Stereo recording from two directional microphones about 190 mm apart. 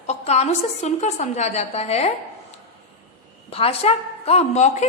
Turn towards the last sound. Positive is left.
turn(degrees=35)  # may be behind; listen again after turning